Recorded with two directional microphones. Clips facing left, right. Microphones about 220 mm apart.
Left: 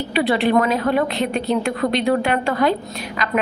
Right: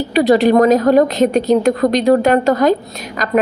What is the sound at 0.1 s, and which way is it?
A woman's voice, 40° right (ahead or behind).